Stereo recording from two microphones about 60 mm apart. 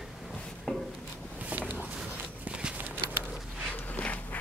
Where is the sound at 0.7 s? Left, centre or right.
Centre.